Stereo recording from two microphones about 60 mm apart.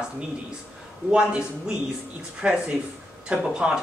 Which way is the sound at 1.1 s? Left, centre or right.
Centre.